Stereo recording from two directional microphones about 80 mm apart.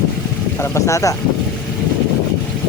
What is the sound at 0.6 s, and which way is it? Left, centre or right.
Vehicle, left.